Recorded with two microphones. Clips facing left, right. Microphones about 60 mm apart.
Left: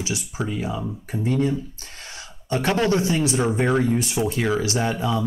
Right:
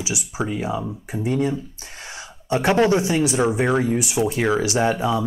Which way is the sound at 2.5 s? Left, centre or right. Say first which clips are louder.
Right 3 dB; centre.